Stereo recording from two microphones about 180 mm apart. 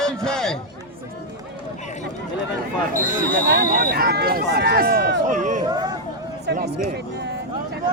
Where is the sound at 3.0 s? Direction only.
50° right (ahead or behind).